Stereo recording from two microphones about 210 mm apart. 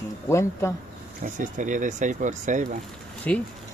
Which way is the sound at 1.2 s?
35° right (ahead or behind).